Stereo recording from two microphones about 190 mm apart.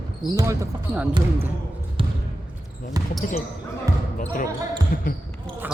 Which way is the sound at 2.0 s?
30° right (ahead or behind).